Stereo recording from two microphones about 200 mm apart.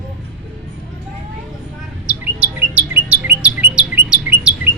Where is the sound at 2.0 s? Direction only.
10° right (ahead or behind).